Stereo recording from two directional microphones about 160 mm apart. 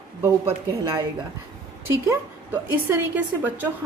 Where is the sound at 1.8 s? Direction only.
15° right (ahead or behind).